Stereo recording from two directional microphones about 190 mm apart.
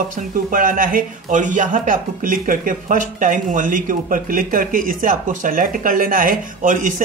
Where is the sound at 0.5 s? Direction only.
45° right (ahead or behind).